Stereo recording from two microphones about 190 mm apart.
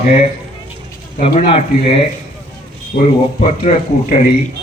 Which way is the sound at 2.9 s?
60° left (ahead or behind).